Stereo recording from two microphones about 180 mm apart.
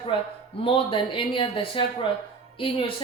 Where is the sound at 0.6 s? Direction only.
30° left (ahead or behind).